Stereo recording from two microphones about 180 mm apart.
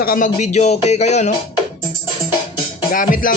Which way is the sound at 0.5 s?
35° left (ahead or behind).